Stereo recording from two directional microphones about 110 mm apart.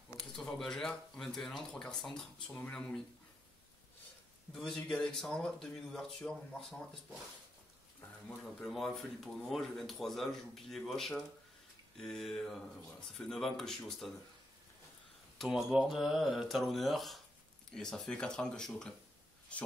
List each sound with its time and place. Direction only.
0.4 s speech: 5° left (ahead or behind)
4.5 s speech: 5° left (ahead or behind)
8.5 s speech: 5° left (ahead or behind)
15.3 s speech: 5° right (ahead or behind)